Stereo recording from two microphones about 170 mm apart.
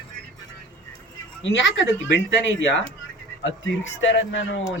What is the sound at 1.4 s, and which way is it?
Speech, 90° left.